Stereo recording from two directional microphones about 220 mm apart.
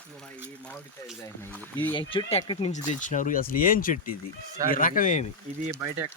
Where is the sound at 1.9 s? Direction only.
20° left (ahead or behind); by 5.2 s 35° left (ahead or behind).